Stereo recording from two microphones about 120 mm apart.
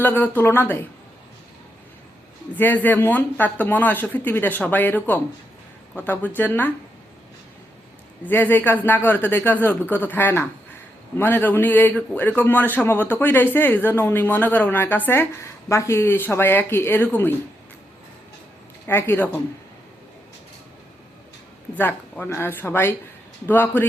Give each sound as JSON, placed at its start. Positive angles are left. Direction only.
{"t": 0.0, "sound": "a man's voice", "side_deg": 15}
{"t": 2.6, "sound": "a man's voice", "side_deg": 15}
{"t": 8.2, "sound": "a man's voice", "side_deg": 20}
{"t": 18.9, "sound": "speech", "side_deg": 20}
{"t": 21.8, "sound": "a man's voice", "side_deg": 15}